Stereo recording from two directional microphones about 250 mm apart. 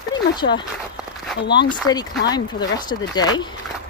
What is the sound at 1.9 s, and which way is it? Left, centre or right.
Speech, centre.